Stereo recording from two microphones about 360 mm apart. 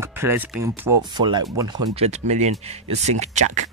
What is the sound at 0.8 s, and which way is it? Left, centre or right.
Speech, centre.